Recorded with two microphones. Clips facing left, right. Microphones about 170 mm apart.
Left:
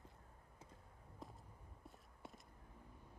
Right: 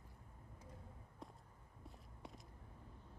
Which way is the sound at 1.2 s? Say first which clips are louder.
Even; centre (ahead or behind).